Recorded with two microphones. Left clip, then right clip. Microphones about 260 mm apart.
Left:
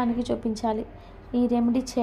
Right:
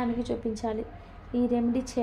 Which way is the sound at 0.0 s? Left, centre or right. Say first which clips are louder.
Left 3 dB; left.